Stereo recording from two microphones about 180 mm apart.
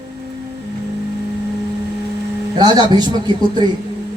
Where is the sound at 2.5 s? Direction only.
25° right (ahead or behind).